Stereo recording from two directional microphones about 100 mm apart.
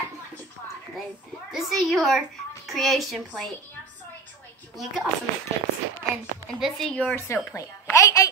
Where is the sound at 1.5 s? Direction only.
Centre (ahead or behind).